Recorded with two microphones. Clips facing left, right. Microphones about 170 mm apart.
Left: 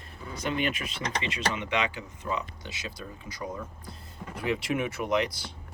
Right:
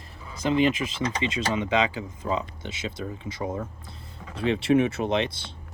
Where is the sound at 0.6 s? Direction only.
90° right.